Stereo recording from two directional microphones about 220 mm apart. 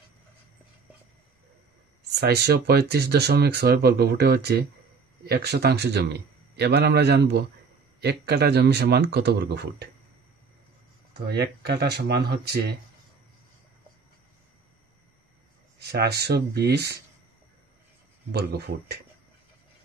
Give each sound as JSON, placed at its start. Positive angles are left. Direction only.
{"t": 2.1, "sound": "speech", "side_deg": -50}
{"t": 11.2, "sound": "speech", "side_deg": -50}
{"t": 15.8, "sound": "speech", "side_deg": -50}